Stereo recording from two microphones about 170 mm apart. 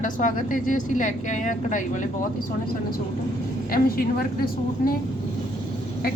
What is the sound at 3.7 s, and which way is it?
Speech, 60° left (ahead or behind).